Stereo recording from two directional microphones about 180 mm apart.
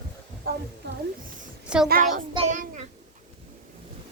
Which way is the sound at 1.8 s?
50° right (ahead or behind).